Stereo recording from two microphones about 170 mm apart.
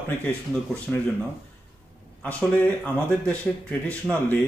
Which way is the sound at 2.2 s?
10° left (ahead or behind).